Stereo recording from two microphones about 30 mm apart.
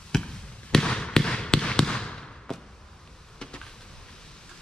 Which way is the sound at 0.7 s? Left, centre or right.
Left.